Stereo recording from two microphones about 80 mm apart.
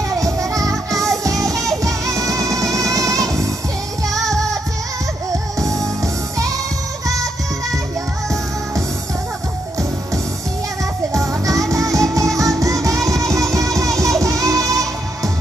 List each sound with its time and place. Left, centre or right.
0.1 s music: right
5.3 s music: right
11.1 s music: right